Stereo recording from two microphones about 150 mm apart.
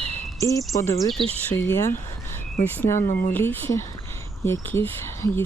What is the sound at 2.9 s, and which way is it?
Speech, 60° left (ahead or behind).